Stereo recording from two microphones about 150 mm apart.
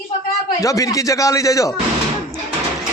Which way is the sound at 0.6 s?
20° left (ahead or behind).